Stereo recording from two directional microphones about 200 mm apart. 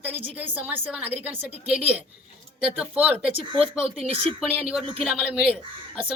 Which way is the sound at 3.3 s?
25° right (ahead or behind).